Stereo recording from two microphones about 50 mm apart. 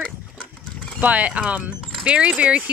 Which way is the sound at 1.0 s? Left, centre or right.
Right.